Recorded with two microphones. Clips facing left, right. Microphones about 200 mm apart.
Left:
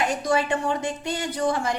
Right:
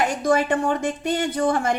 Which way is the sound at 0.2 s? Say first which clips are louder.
Right 4 dB; 55° right (ahead or behind).